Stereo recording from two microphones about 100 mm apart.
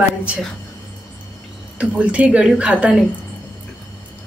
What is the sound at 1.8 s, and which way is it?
Speech, 15° right (ahead or behind).